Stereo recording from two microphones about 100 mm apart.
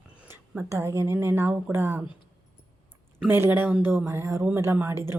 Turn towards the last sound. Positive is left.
turn(degrees=-25)  # may be behind; listen again after turning